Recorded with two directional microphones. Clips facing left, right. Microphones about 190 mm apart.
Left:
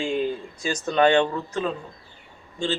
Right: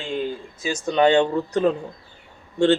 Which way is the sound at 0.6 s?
10° right (ahead or behind).